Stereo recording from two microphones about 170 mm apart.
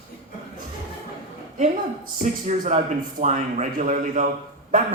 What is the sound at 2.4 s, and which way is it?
A man's voice, 45° right (ahead or behind).